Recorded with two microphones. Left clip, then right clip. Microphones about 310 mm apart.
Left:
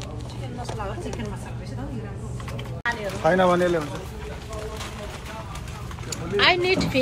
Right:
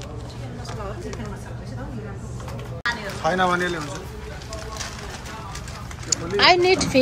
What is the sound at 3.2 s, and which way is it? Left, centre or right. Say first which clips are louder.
Speech: left 2 dB; left.